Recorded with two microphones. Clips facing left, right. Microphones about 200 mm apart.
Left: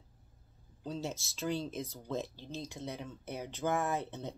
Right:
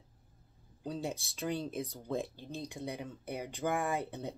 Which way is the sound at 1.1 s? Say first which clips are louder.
Right 2 dB; 60° right (ahead or behind).